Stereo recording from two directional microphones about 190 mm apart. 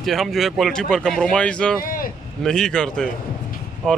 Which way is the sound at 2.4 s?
5° left (ahead or behind).